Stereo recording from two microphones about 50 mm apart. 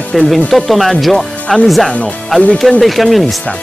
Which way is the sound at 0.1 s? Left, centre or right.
Centre.